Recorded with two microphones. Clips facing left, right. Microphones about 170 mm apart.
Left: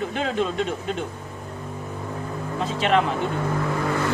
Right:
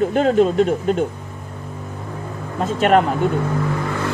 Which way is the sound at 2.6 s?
50° right (ahead or behind).